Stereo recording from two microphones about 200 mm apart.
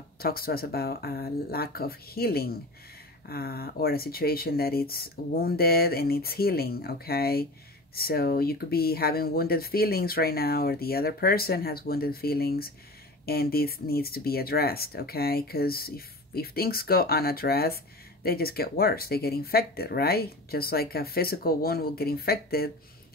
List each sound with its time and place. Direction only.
0.2 s speech: 50° left (ahead or behind)